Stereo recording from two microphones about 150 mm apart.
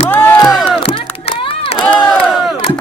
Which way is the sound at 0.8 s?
35° left (ahead or behind).